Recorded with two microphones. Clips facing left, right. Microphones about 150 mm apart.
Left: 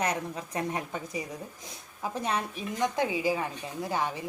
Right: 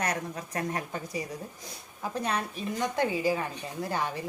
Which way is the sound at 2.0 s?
20° left (ahead or behind).